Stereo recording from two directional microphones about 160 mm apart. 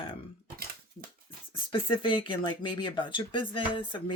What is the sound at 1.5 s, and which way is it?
Speech, 30° left (ahead or behind).